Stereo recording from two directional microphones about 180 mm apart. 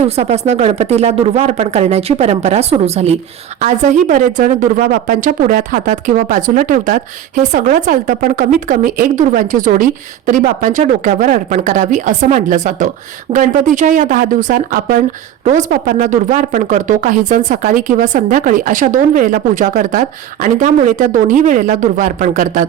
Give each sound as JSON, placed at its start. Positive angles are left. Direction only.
{"t": 0.2, "sound": "a woman's voice", "side_deg": -35}